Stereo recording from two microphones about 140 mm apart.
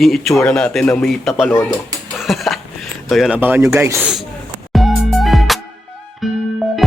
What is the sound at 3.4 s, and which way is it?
Speech, 15° right (ahead or behind).